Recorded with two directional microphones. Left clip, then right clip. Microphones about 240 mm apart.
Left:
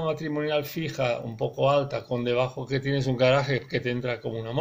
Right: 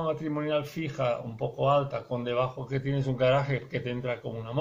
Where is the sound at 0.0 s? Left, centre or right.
Left.